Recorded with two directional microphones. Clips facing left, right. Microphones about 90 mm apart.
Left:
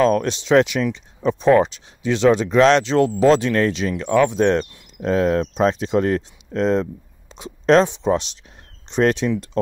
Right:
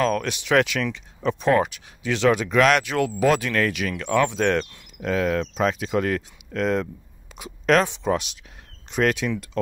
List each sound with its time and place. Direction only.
0.2 s speech: 20° left (ahead or behind)